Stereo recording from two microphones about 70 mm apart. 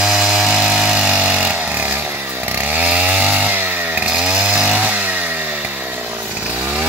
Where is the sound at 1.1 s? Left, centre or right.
Centre.